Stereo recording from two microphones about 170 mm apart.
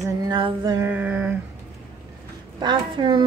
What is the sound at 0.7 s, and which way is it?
Mantra, 10° right (ahead or behind).